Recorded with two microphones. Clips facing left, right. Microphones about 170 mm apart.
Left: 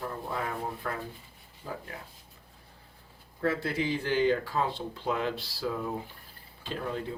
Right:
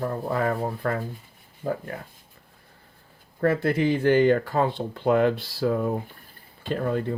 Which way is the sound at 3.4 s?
55° right (ahead or behind).